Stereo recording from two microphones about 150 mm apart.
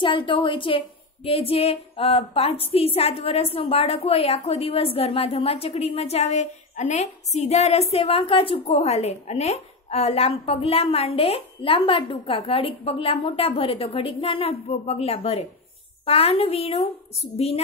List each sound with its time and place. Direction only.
0.0 s a woman's voice: 30° left (ahead or behind)